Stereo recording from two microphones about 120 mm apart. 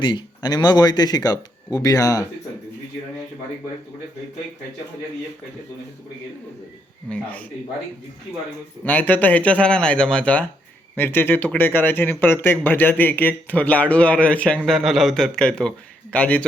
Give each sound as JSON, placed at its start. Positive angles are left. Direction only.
{"t": 0.0, "sound": "speech", "side_deg": 40}
{"t": 7.1, "sound": "speech", "side_deg": 10}
{"t": 8.8, "sound": "a man's voice", "side_deg": 15}